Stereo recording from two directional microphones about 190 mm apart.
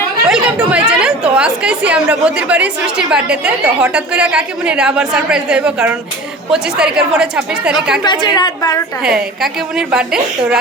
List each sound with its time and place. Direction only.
0.3 s speech: 5° right (ahead or behind)
8.0 s a woman's voice: 25° left (ahead or behind)
9.0 s speech: 5° right (ahead or behind)